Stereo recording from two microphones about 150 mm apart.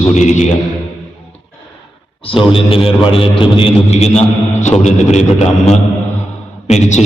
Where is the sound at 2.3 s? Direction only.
35° left (ahead or behind).